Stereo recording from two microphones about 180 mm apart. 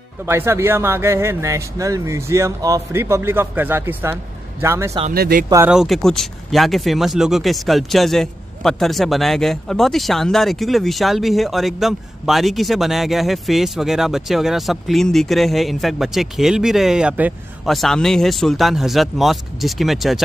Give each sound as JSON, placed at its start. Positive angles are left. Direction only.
{"t": 0.2, "sound": "speech", "side_deg": -15}
{"t": 5.1, "sound": "speech", "side_deg": -55}
{"t": 5.7, "sound": "speech", "side_deg": 0}